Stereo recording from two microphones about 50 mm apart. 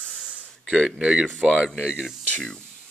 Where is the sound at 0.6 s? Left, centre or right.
Centre.